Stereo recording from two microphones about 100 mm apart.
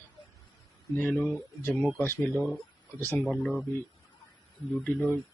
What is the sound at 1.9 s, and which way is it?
Speech, 20° left (ahead or behind).